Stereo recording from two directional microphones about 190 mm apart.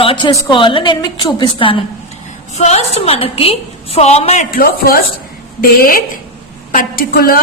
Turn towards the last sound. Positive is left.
turn(degrees=50)  # may be behind; listen again after turning